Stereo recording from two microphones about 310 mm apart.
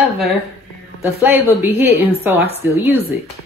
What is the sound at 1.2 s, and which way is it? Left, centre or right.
A woman's voice, centre.